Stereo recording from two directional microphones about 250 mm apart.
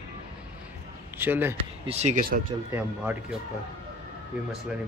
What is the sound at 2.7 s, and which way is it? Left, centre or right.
Speech, centre.